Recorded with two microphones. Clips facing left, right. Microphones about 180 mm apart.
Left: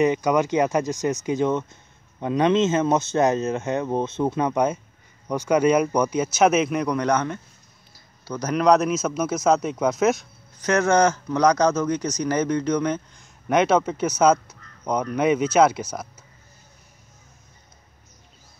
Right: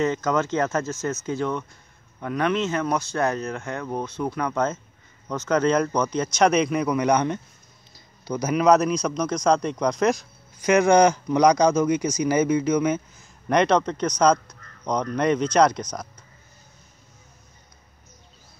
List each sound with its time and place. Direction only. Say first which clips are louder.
0.0 s a man's voice: left 3 dB; 15° left (ahead or behind)
10.6 s speech: right 2 dB; 10° right (ahead or behind); by 16.1 s 5° left (ahead or behind)